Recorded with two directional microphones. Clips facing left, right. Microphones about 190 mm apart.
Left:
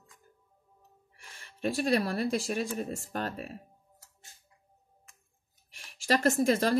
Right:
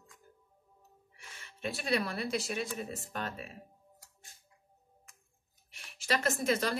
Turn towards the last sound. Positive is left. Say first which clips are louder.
# left 6 dB
turn(degrees=45)  # may be behind; listen again after turning